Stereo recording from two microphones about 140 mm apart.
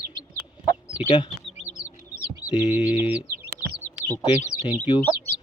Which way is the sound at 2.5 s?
45° left (ahead or behind).